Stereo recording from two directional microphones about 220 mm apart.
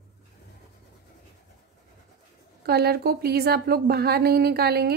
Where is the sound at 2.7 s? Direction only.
45° right (ahead or behind).